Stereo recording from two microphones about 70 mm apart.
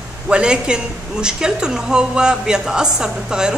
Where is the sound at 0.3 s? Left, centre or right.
Centre.